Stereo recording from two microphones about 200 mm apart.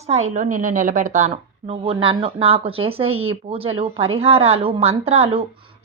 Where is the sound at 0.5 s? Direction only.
40° right (ahead or behind).